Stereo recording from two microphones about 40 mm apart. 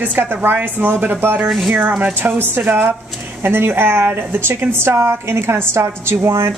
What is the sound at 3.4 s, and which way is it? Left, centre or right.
A woman's voice, right.